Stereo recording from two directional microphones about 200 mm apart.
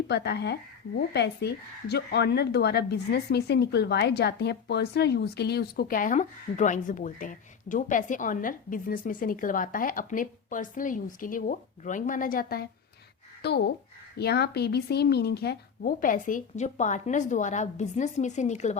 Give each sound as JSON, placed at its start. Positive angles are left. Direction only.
{"t": 0.1, "sound": "a woman's voice", "side_deg": 55}